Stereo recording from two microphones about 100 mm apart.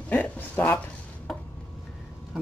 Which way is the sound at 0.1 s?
20° left (ahead or behind).